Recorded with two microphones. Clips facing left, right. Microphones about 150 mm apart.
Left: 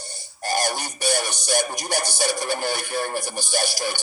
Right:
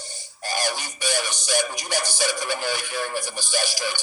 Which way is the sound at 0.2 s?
45° left (ahead or behind).